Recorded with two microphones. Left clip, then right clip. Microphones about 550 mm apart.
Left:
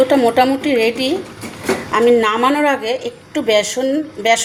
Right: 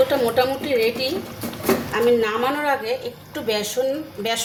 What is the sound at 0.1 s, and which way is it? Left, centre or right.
Speech, centre.